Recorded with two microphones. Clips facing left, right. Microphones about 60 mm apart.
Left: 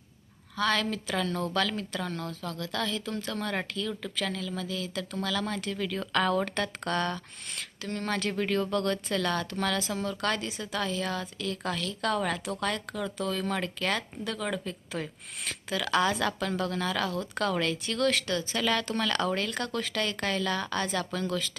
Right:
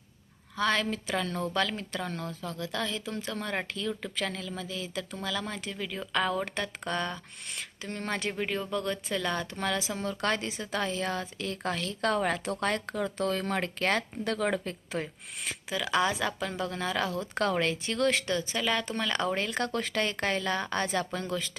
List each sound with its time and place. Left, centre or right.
0.5 s speech: right; by 7.6 s centre
7.8 s speech: right
10.0 s speech: right
15.0 s speech: centre
16.5 s speech: right
18.5 s speech: centre
19.5 s speech: right